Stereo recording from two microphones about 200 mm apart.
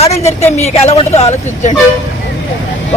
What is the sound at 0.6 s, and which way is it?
Speech, 30° left (ahead or behind).